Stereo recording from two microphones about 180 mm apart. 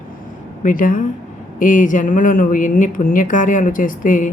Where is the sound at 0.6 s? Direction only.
50° left (ahead or behind).